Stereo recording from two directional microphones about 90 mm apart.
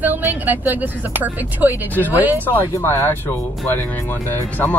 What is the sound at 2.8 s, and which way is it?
Speech, 30° left (ahead or behind).